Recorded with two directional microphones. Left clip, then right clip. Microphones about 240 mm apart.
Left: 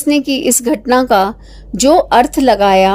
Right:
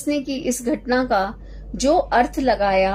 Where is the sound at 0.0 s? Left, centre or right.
Left.